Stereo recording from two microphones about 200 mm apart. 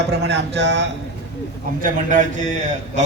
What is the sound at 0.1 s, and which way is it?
Speech, 60° right (ahead or behind).